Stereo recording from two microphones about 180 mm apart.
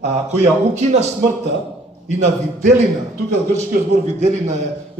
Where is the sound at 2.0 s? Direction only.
40° right (ahead or behind).